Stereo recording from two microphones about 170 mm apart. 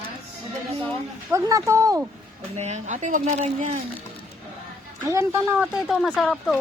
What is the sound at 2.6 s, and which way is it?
Speech, 45° right (ahead or behind).